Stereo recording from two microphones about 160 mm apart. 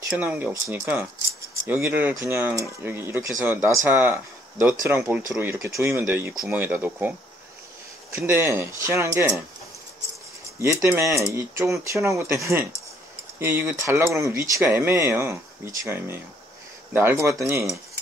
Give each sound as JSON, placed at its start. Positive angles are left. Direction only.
{"t": 0.1, "sound": "speech", "side_deg": -10}
{"t": 8.2, "sound": "speech", "side_deg": -15}
{"t": 10.6, "sound": "speech", "side_deg": -15}